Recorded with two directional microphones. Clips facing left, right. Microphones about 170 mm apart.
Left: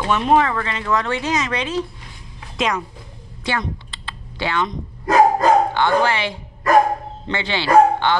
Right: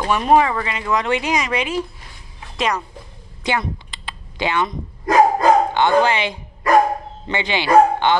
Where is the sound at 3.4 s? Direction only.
15° right (ahead or behind).